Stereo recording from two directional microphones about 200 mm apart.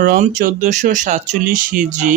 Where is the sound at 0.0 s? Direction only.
45° right (ahead or behind).